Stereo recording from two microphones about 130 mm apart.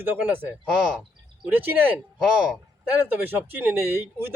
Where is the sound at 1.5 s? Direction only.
15° right (ahead or behind).